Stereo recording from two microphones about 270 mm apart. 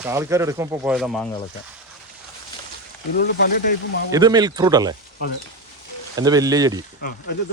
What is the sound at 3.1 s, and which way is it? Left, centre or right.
Speech, left.